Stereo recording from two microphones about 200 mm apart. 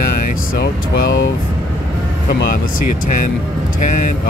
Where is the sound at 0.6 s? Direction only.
50° left (ahead or behind).